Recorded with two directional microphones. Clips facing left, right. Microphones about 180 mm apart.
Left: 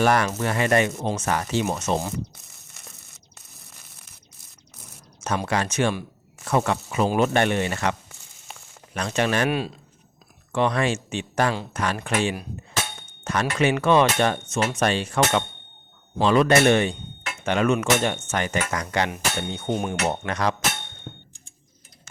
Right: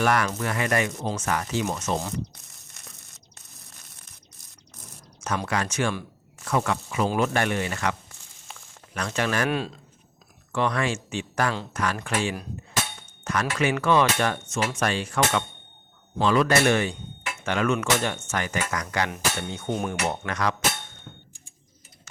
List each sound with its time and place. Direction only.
0.0 s speech: 30° left (ahead or behind)
5.5 s speech: 25° left (ahead or behind)
6.6 s speech: 35° left (ahead or behind)
9.0 s speech: 20° left (ahead or behind)
9.5 s a man's voice: 10° left (ahead or behind)
10.5 s speech: 20° left (ahead or behind)
21.1 s clang: 45° left (ahead or behind)